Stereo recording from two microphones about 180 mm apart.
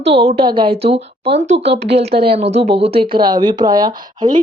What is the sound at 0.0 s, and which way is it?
A woman's voice, 35° right (ahead or behind).